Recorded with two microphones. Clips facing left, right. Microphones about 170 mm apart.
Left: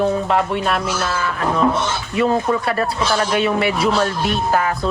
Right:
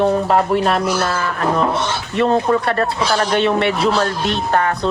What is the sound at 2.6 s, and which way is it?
Speech, 5° left (ahead or behind).